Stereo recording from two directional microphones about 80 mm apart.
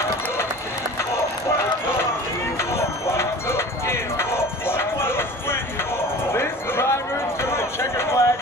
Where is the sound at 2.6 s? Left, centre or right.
Left.